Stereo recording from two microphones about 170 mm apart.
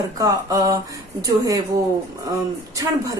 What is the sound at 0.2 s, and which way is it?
A woman's voice, 20° right (ahead or behind).